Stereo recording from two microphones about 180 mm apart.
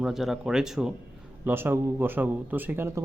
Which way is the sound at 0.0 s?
Centre (ahead or behind).